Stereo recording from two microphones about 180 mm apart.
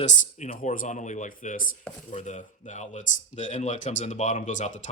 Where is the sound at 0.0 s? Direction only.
40° left (ahead or behind).